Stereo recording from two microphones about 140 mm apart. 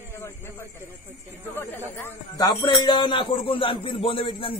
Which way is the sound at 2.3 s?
30° left (ahead or behind).